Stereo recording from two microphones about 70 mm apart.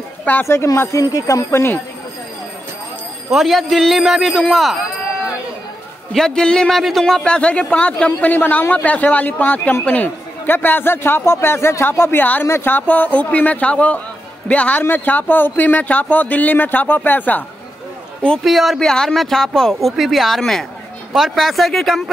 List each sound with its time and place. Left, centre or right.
0.2 s a sound: left
0.9 s speech: left
3.3 s speech: centre
6.1 s a man's voice: centre
6.7 s a man's voice: centre; by 17.4 s left
18.4 s speech: centre
18.8 s speech: centre